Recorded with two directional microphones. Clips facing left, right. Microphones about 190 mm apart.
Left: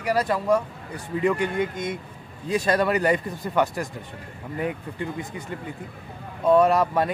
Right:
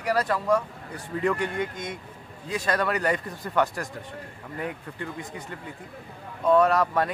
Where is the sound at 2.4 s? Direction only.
30° left (ahead or behind).